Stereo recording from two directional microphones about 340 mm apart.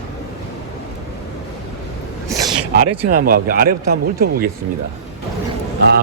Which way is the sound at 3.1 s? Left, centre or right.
Right.